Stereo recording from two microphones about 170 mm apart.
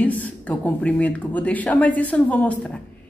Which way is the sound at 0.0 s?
10° left (ahead or behind).